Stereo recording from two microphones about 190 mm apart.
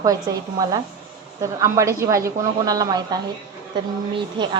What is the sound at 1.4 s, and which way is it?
A woman's voice, 15° right (ahead or behind).